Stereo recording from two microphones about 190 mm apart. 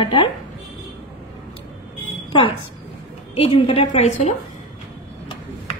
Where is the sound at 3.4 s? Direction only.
35° left (ahead or behind).